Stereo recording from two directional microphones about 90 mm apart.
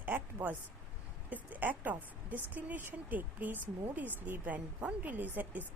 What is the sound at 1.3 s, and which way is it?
A woman's voice, 20° right (ahead or behind).